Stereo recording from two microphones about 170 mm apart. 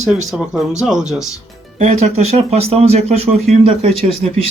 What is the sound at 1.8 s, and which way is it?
Speech, 40° right (ahead or behind).